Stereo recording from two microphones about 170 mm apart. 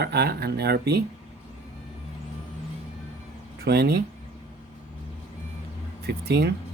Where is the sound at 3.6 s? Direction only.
70° right (ahead or behind).